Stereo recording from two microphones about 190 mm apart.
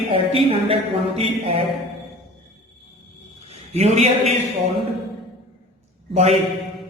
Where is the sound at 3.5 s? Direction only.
35° right (ahead or behind).